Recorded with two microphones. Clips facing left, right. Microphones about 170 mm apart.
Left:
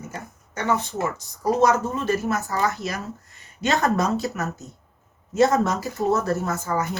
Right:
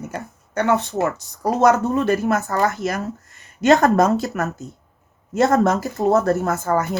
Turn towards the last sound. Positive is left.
turn(degrees=-60)  # may be behind; listen again after turning